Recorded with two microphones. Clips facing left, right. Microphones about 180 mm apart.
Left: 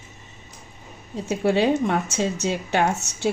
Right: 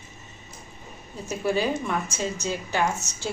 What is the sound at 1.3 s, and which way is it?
A woman's voice, 75° left (ahead or behind).